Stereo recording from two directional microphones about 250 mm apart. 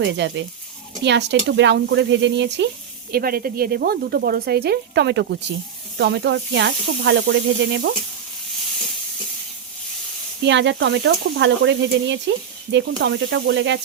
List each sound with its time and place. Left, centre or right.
0.0 s speech: right
10.4 s speech: right